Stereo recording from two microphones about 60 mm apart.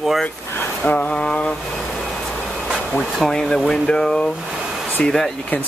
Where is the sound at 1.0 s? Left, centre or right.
Centre.